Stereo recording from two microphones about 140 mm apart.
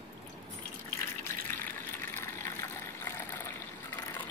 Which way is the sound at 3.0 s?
20° left (ahead or behind).